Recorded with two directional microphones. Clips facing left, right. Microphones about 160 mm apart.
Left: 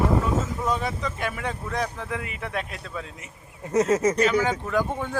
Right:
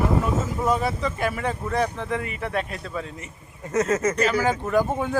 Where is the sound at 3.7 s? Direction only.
10° left (ahead or behind).